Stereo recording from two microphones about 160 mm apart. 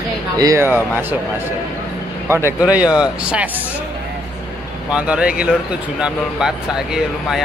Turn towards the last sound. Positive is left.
turn(degrees=-5)  # may be behind; listen again after turning